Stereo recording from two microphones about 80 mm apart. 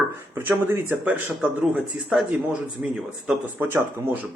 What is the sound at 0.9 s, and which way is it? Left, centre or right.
Speech, centre.